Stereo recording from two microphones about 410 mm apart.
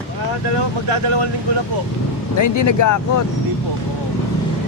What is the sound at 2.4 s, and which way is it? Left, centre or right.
Speech, left.